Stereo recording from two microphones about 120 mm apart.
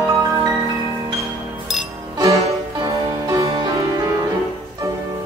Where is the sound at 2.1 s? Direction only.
30° right (ahead or behind).